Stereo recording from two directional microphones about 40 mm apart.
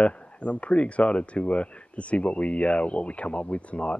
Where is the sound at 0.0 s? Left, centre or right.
Left.